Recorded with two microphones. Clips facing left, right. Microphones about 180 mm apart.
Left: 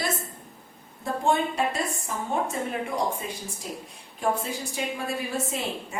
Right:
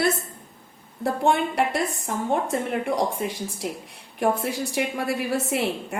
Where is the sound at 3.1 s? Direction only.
85° right.